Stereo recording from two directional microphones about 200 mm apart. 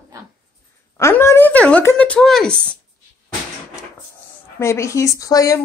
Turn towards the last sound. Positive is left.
turn(degrees=15)  # may be behind; listen again after turning